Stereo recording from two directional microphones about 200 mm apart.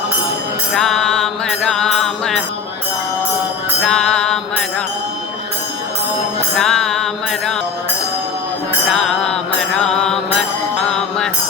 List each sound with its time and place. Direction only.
0.7 s music: centre (ahead or behind)
3.8 s music: 5° left (ahead or behind)
6.6 s music: 5° left (ahead or behind)
8.9 s mantra: 5° left (ahead or behind)
10.8 s music: 5° left (ahead or behind)